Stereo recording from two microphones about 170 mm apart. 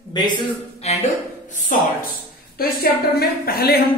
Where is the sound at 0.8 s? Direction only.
40° left (ahead or behind).